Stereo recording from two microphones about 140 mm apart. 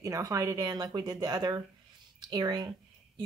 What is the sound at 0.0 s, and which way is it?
Speech, 25° right (ahead or behind).